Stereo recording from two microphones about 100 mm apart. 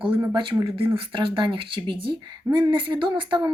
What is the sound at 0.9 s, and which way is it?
Speech, 60° right (ahead or behind).